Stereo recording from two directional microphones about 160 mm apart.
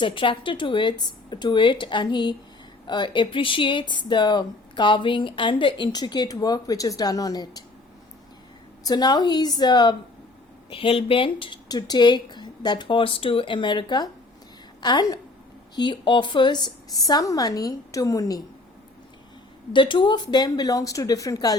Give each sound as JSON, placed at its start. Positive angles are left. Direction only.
{"t": 0.0, "sound": "speech", "side_deg": 30}
{"t": 8.8, "sound": "a woman's voice", "side_deg": 25}
{"t": 19.7, "sound": "speech", "side_deg": 30}